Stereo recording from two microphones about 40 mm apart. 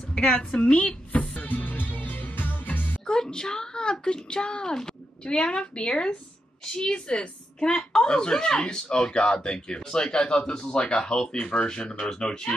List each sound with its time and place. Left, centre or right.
0.3 s a woman's voice: centre
0.6 s music: left
3.1 s a woman's voice: centre